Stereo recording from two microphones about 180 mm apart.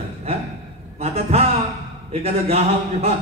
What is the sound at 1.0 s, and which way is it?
A man's voice, 35° right (ahead or behind).